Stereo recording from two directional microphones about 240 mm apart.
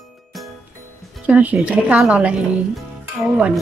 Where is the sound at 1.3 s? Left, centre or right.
Centre.